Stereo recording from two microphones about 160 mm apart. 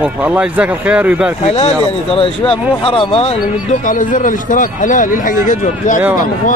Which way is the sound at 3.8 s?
55° left (ahead or behind).